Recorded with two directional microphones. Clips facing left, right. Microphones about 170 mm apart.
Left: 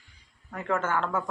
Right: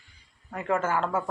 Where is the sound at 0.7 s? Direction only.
10° right (ahead or behind).